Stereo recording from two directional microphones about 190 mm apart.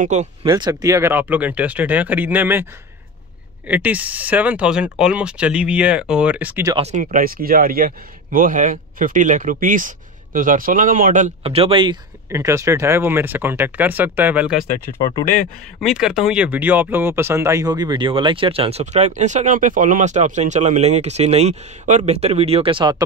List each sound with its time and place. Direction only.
0.0 s speech: 35° right (ahead or behind)
0.5 s speech: 20° right (ahead or behind)
3.6 s speech: 10° right (ahead or behind)
6.7 s speech: 30° right (ahead or behind)
7.0 s speech: 45° right (ahead or behind); by 12.0 s 25° right (ahead or behind)
12.3 s speech: 15° right (ahead or behind)
15.8 s speech: 5° right (ahead or behind); by 23.0 s 25° right (ahead or behind)